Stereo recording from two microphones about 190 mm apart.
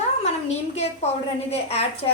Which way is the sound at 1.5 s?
35° left (ahead or behind).